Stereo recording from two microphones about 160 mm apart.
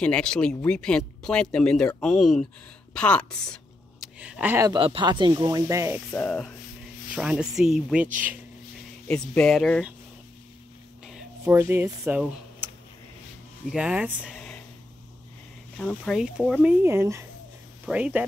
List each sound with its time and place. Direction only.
0.0 s speech: 5° left (ahead or behind)
2.9 s a sound: 5° left (ahead or behind)
4.2 s speech: 10° right (ahead or behind)
4.6 s speech: 30° right (ahead or behind)
6.1 s speech: 5° left (ahead or behind)
7.1 s speech: 5° right (ahead or behind)
9.0 s speech: 5° left (ahead or behind)
11.4 s speech: 15° right (ahead or behind)
13.7 s speech: 5° right (ahead or behind)
15.8 s speech: 5° left (ahead or behind)
16.2 s speech: 5° right (ahead or behind)
16.6 s speech: 15° right (ahead or behind)